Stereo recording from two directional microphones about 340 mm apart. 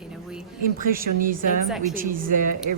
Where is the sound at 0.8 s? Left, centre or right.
Right.